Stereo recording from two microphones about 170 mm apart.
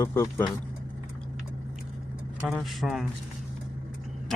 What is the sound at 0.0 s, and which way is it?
Speech, 15° left (ahead or behind).